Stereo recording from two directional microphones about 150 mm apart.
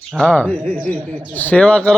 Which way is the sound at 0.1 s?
5° left (ahead or behind).